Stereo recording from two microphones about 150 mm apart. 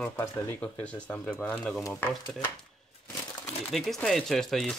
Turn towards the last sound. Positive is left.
turn(degrees=0)  # may be behind; listen again after turning